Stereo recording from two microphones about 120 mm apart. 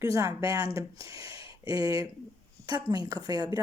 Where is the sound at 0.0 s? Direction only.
30° right (ahead or behind).